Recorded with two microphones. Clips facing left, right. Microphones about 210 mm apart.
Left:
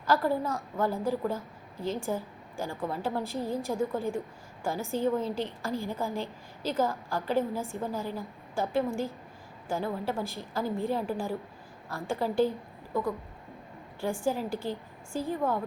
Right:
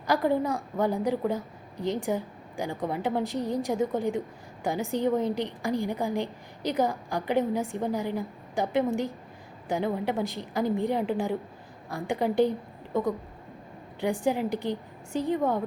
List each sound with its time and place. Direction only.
0.0 s a woman's voice: 15° right (ahead or behind)
14.0 s a woman's voice: 20° right (ahead or behind)